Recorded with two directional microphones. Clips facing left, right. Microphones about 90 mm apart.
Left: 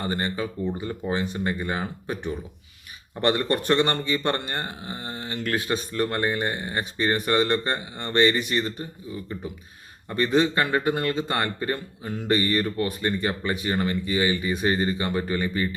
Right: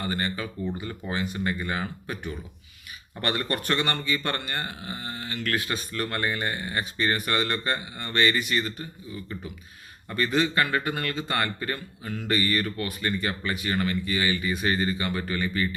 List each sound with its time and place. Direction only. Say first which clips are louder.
0.0 s speech: left 2 dB; 25° left (ahead or behind)
10.1 s speech: left 4 dB; 25° left (ahead or behind)